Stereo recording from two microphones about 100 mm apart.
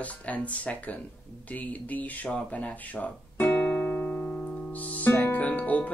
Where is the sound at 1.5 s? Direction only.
15° left (ahead or behind).